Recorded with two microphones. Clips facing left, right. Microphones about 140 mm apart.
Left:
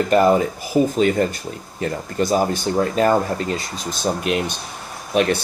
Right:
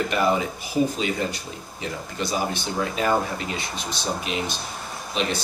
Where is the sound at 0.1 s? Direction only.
45° left (ahead or behind).